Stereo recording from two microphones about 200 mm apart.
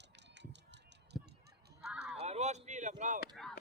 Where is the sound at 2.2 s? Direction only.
35° right (ahead or behind).